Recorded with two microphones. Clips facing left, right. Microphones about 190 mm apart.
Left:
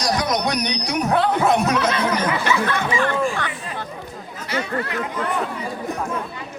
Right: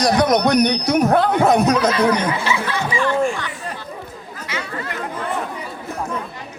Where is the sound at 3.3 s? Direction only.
55° left (ahead or behind).